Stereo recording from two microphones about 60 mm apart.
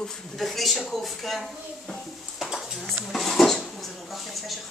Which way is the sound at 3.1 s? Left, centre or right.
Centre.